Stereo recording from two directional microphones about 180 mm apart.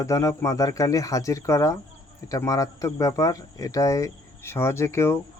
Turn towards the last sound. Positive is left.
turn(degrees=15)  # may be behind; listen again after turning